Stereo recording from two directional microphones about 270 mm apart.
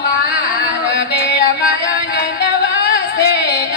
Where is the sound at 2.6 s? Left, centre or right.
Left.